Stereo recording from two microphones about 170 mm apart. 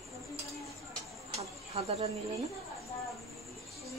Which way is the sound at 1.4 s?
40° right (ahead or behind).